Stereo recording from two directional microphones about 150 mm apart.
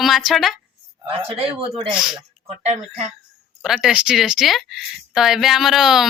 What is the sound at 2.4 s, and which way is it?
Speech, 50° right (ahead or behind).